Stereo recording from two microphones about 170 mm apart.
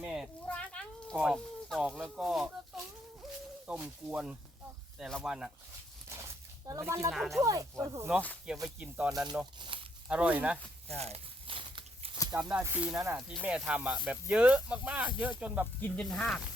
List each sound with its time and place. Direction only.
0.0 s a sound: 5° right (ahead or behind)
0.4 s a sound: 5° left (ahead or behind)
3.7 s speech: 5° right (ahead or behind)
6.7 s speech: 15° right (ahead or behind)
7.1 s speech: centre (ahead or behind)
7.4 s speech: 20° right (ahead or behind)
9.6 s speech: 30° right (ahead or behind)
10.1 s speech: 10° right (ahead or behind)
10.8 s a sound: 35° right (ahead or behind)
12.3 s speech: 5° right (ahead or behind)
15.8 s speech: 5° left (ahead or behind)